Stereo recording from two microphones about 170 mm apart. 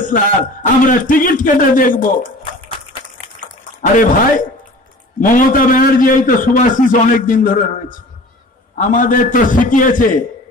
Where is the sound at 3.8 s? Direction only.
50° left (ahead or behind).